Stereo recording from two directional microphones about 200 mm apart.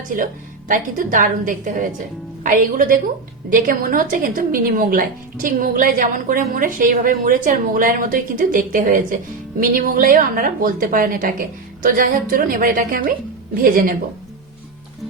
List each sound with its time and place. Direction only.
0.7 s a woman's voice: 40° right (ahead or behind)